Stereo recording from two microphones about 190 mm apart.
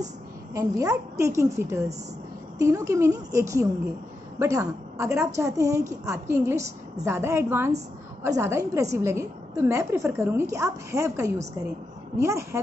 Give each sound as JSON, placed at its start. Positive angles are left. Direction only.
{"t": 0.6, "sound": "a woman's voice", "side_deg": -15}